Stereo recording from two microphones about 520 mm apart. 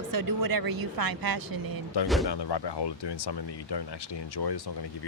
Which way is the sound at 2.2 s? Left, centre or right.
Left.